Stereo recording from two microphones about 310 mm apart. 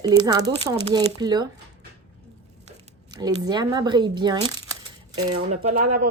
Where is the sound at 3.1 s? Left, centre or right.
Centre.